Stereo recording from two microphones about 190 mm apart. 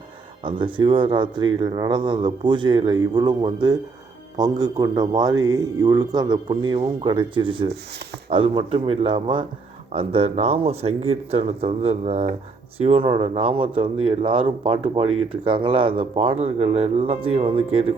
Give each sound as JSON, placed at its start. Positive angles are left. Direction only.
{"t": 0.4, "sound": "speech", "side_deg": -25}